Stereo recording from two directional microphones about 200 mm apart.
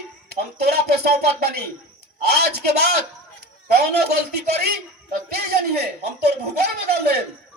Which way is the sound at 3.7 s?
50° right (ahead or behind).